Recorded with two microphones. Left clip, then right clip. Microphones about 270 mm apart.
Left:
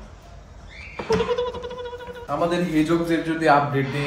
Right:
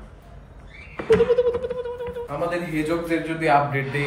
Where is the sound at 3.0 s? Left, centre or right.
Centre.